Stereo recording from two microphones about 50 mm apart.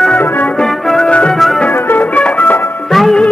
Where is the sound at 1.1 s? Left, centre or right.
Left.